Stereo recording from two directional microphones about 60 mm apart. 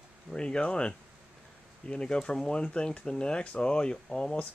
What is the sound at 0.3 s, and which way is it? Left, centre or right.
Speech, centre.